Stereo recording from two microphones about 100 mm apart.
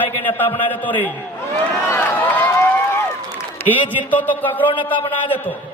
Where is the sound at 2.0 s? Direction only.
15° left (ahead or behind).